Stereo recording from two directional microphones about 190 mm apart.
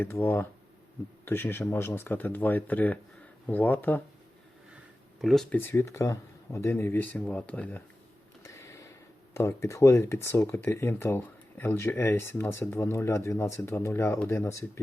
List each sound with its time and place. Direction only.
0.0 s speech: 10° left (ahead or behind)
5.2 s speech: centre (ahead or behind)
8.4 s a sound: 15° left (ahead or behind)
9.3 s speech: 15° left (ahead or behind)